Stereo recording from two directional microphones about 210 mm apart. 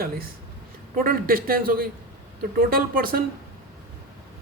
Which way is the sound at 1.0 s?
45° right (ahead or behind).